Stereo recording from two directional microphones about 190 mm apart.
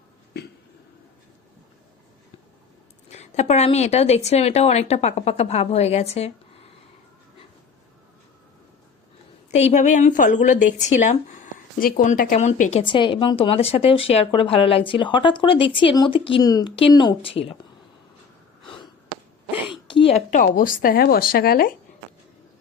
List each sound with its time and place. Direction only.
0.4 s a sound: 65° left (ahead or behind)
3.1 s speech: 35° left (ahead or behind)
9.6 s speech: 35° left (ahead or behind)
12.8 s a woman's voice: 25° left (ahead or behind)
18.6 s sniff: 25° left (ahead or behind)
19.6 s speech: 25° left (ahead or behind); by 21.7 s 50° left (ahead or behind)